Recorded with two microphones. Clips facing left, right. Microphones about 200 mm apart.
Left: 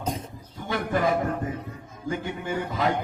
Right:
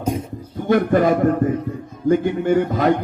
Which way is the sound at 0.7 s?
50° right (ahead or behind).